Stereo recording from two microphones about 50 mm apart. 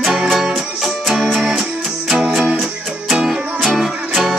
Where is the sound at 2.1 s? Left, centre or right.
Centre.